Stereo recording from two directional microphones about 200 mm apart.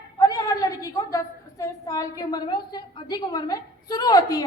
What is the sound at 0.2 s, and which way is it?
A woman's voice, 15° left (ahead or behind).